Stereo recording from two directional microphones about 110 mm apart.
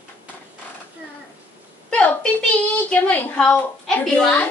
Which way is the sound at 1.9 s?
10° left (ahead or behind).